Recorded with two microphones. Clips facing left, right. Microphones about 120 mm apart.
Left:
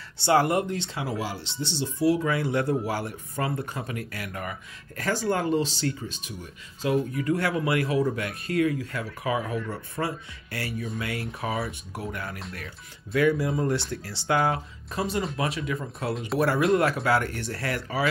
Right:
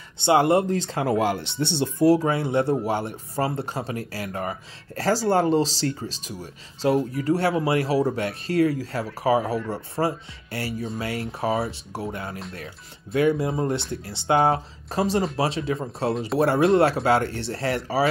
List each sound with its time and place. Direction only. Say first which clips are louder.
0.2 s speech: right 4 dB; 20° right (ahead or behind); by 1.1 s 40° right (ahead or behind)
1.1 s speech: right 9 dB; 60° right (ahead or behind)
2.0 s speech: right 4 dB; 30° right (ahead or behind)